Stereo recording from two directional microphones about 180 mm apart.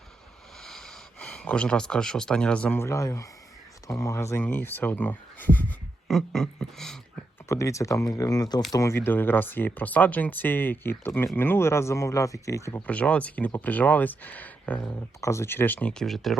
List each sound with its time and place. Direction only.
0.6 s speech: 5° left (ahead or behind)
7.4 s speech: 15° left (ahead or behind); by 16.4 s centre (ahead or behind)